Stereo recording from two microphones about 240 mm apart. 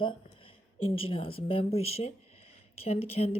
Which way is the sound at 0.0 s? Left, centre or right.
Left.